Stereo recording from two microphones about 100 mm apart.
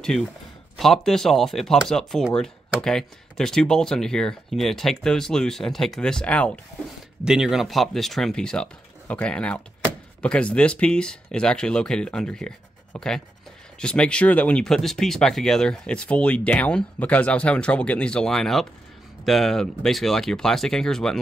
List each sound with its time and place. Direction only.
0.0 s speech: 5° left (ahead or behind)
7.2 s speech: 5° right (ahead or behind)